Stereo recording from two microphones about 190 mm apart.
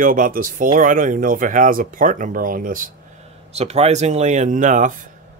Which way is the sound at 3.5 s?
35° right (ahead or behind).